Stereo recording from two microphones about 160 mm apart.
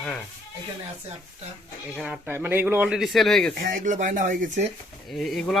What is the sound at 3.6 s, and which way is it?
Speech, 55° right (ahead or behind).